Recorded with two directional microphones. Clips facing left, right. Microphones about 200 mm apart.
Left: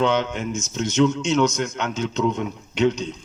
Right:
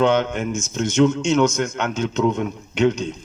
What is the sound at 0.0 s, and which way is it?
A man's voice, 55° right (ahead or behind).